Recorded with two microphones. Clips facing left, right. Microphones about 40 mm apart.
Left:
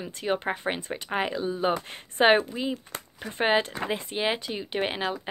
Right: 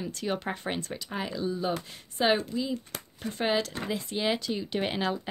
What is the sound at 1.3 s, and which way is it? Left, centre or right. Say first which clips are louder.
Speech: left 4 dB; left.